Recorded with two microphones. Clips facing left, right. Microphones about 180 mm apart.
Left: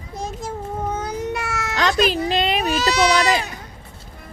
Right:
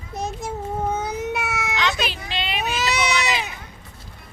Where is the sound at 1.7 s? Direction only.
40° left (ahead or behind).